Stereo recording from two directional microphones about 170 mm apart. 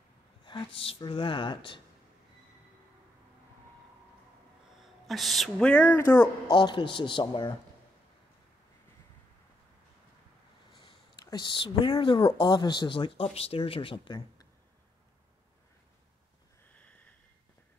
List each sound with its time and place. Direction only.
0.5 s speech: 30° left (ahead or behind)
5.0 s speech: centre (ahead or behind)
6.5 s speech: 30° left (ahead or behind)
11.2 s speech: 25° left (ahead or behind)
16.7 s a sound: 10° left (ahead or behind)